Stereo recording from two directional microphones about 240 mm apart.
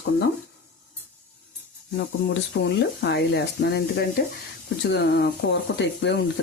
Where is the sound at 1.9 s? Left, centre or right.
Left.